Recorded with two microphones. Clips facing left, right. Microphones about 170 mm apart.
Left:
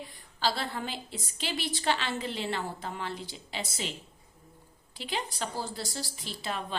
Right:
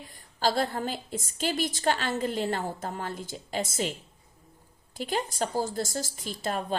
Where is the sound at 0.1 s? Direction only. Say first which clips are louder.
Right 5 dB; 45° right (ahead or behind).